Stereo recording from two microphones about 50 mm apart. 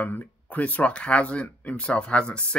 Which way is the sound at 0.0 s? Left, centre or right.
Left.